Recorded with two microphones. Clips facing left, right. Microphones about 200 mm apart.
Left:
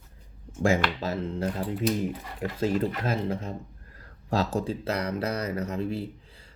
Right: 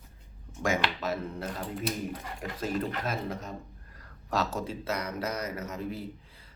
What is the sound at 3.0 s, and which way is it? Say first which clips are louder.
Speech: left 5 dB; 30° left (ahead or behind).